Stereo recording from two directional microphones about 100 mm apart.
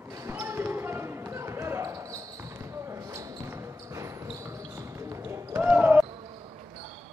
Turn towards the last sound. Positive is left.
turn(degrees=-15)  # may be behind; listen again after turning